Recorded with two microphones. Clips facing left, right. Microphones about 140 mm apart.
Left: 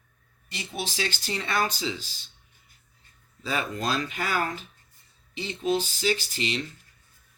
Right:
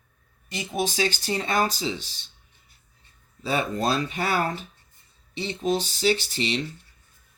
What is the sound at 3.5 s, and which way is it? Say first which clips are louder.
Speech: right 4 dB; 30° right (ahead or behind).